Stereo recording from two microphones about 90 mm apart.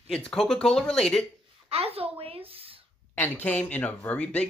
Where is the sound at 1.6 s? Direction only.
90° right.